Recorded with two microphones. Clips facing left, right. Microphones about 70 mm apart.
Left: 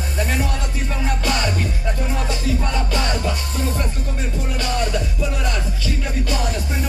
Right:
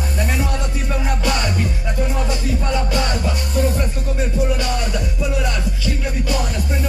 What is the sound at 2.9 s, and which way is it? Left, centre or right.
Music, centre.